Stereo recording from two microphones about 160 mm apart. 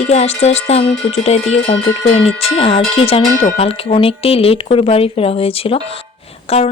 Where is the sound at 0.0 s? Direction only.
40° left (ahead or behind).